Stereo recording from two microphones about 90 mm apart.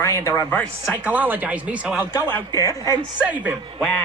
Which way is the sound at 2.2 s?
25° left (ahead or behind).